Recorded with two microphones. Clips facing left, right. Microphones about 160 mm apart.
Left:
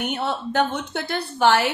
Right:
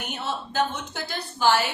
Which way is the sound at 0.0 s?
65° left (ahead or behind).